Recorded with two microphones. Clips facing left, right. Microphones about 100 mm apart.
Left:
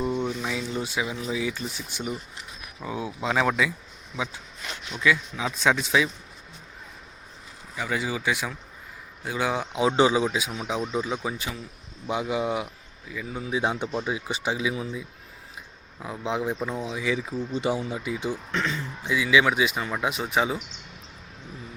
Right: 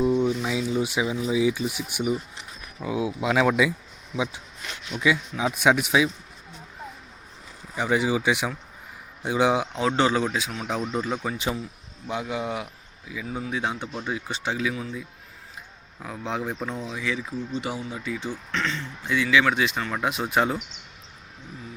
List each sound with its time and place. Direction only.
0.2 s speech: 5° right (ahead or behind)
4.9 s speech: 20° right (ahead or behind)
7.8 s speech: 20° right (ahead or behind)
9.7 s speech: 15° left (ahead or behind)
13.1 s speech: 5° right (ahead or behind)
13.4 s speech: 10° left (ahead or behind)
16.0 s speech: 5° left (ahead or behind)
17.0 s speech: 20° left (ahead or behind); by 20.6 s centre (ahead or behind)